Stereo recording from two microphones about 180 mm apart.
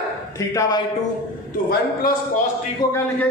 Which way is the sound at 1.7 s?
55° left (ahead or behind).